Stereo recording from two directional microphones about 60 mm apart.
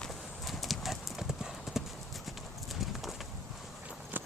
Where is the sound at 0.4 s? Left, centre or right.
Centre.